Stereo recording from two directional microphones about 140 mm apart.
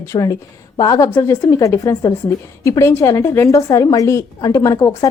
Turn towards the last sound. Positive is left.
turn(degrees=25)  # may be behind; listen again after turning